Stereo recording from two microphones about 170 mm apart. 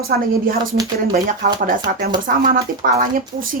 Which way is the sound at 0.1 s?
65° right (ahead or behind).